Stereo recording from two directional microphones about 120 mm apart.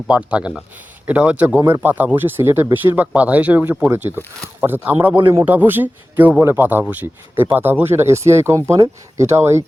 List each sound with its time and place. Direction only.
0.1 s speech: 10° right (ahead or behind)